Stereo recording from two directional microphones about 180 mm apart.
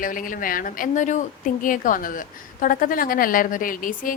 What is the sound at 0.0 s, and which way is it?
A woman's voice, 50° left (ahead or behind).